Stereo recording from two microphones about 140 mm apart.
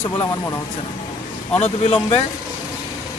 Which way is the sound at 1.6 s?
45° left (ahead or behind).